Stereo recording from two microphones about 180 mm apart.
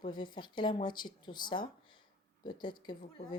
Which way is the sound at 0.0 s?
25° left (ahead or behind).